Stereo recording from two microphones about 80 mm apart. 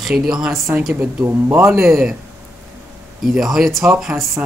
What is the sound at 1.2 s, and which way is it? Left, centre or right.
Speech, right.